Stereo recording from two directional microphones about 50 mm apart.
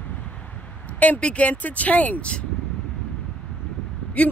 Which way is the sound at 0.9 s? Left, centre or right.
Left.